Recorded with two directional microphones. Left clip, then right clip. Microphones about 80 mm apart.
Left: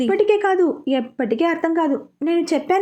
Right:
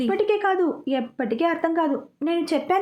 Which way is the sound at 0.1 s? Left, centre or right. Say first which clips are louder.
Left 5 dB; left.